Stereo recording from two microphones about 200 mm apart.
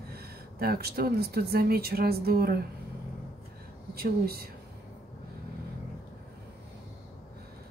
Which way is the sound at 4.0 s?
50° right (ahead or behind).